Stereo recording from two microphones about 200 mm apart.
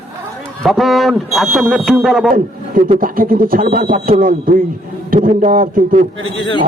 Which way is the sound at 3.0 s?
45° right (ahead or behind).